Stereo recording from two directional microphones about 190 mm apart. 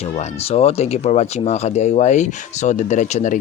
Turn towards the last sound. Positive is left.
turn(degrees=40)  # may be behind; listen again after turning